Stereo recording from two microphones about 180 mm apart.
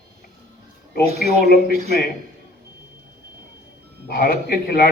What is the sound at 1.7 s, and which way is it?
Speech, 60° left (ahead or behind).